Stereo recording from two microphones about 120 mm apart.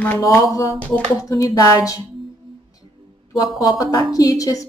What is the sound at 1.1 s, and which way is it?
Speech, 30° left (ahead or behind).